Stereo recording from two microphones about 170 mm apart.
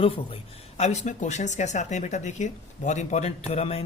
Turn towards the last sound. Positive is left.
turn(degrees=40)  # may be behind; listen again after turning